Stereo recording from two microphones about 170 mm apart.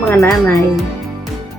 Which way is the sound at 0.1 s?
15° left (ahead or behind).